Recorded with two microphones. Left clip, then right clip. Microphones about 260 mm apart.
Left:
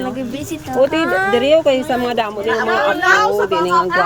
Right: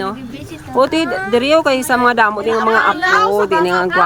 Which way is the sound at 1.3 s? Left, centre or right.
Centre.